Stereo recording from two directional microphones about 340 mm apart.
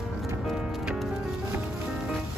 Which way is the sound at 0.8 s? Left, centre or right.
Centre.